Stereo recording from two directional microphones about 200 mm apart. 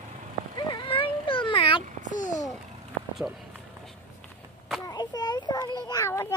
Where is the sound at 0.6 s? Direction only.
20° left (ahead or behind).